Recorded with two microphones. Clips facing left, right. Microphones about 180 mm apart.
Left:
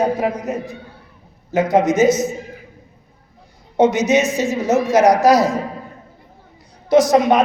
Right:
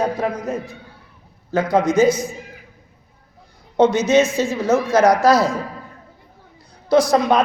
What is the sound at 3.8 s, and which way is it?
A man's voice, 20° left (ahead or behind).